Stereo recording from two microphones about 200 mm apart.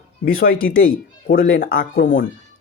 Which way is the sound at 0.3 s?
45° left (ahead or behind).